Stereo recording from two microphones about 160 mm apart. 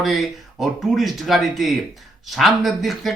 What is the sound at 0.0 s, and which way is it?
Speech, centre (ahead or behind).